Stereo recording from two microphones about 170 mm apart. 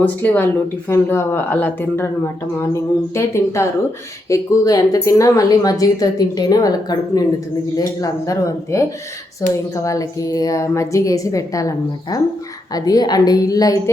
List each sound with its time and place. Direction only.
0.0 s a woman's voice: 10° left (ahead or behind)